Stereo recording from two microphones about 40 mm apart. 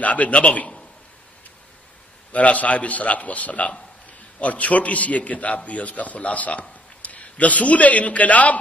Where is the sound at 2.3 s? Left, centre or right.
Left.